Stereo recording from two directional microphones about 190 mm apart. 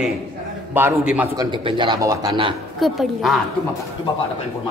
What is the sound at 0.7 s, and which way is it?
Speech, 10° right (ahead or behind).